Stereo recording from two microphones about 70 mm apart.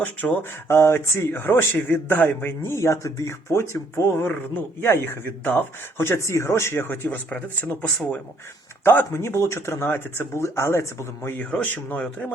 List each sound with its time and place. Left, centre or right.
0.2 s speech: centre
0.7 s speech: left
8.8 s speech: left
11.3 s speech: left